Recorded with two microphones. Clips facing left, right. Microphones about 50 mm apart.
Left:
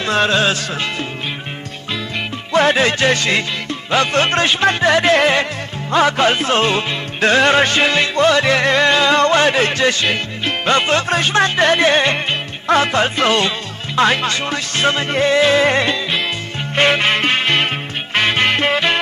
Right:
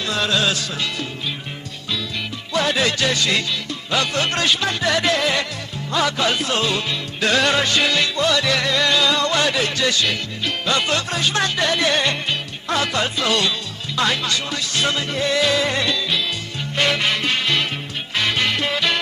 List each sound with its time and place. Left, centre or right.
0.0 s music: left